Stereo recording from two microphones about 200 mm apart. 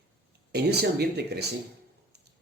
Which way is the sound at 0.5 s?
55° right (ahead or behind).